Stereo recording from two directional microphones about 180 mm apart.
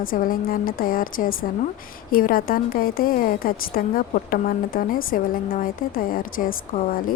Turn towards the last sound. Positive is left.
turn(degrees=50)  # may be behind; listen again after turning